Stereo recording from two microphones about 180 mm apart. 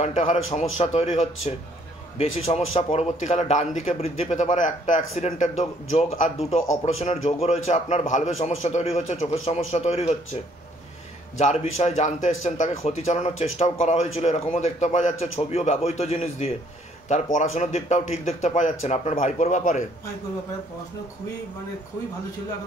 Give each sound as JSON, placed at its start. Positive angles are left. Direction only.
{"t": 0.0, "sound": "a man's voice", "side_deg": 40}
{"t": 2.4, "sound": "a man's voice", "side_deg": 35}
{"t": 11.3, "sound": "a man's voice", "side_deg": 40}